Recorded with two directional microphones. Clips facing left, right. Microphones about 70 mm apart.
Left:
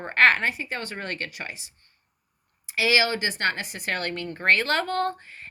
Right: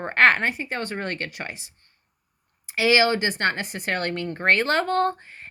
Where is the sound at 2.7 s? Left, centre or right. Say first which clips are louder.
Right 3 dB; right.